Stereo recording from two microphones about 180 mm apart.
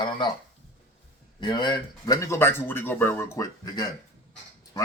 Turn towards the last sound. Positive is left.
turn(degrees=20)  # may be behind; listen again after turning